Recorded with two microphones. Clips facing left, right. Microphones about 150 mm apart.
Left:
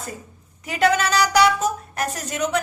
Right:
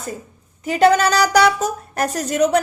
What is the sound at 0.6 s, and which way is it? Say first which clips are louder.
A woman's voice: right 6 dB; 35° right (ahead or behind).